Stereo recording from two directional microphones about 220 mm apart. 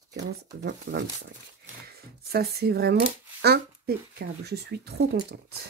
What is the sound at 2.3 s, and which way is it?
Speech, 45° right (ahead or behind).